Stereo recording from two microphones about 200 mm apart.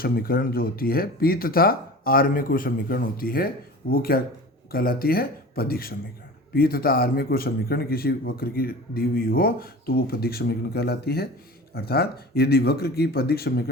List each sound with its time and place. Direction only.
0.0 s a man's voice: 50° left (ahead or behind)